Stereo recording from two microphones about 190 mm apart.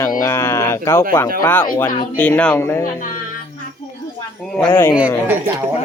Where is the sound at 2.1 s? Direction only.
10° left (ahead or behind).